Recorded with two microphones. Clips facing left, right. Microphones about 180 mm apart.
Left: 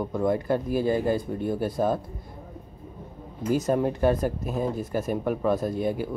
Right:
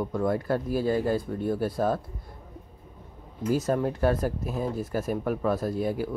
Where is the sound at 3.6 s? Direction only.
15° left (ahead or behind).